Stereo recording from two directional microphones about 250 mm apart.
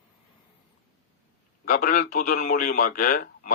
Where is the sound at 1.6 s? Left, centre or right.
Left.